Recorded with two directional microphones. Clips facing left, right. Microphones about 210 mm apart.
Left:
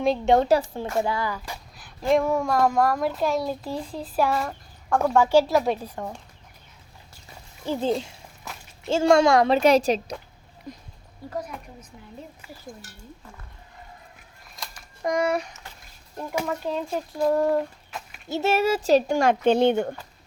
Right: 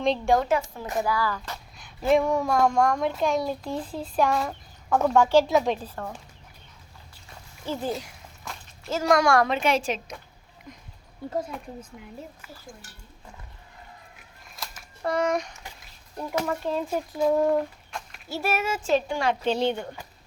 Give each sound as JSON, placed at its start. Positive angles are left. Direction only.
{"t": 0.3, "sound": "a woman's voice", "side_deg": 30}
{"t": 1.3, "sound": "speech", "side_deg": 10}
{"t": 1.8, "sound": "speech", "side_deg": 0}
{"t": 7.6, "sound": "speech", "side_deg": 20}
{"t": 9.5, "sound": "a woman's voice", "side_deg": 40}
{"t": 11.3, "sound": "a woman's voice", "side_deg": -25}
{"t": 14.5, "sound": "a sound", "side_deg": -5}
{"t": 15.0, "sound": "speech", "side_deg": 10}
{"t": 18.3, "sound": "speech", "side_deg": 25}